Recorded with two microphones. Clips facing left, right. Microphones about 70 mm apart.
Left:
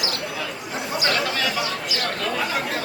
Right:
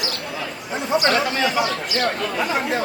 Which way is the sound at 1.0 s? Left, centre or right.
Right.